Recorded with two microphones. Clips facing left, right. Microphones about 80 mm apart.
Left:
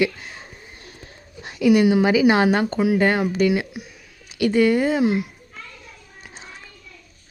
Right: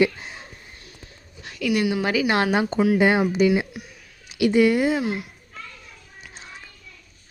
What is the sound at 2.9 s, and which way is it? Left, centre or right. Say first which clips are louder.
Speech: right 1 dB; centre.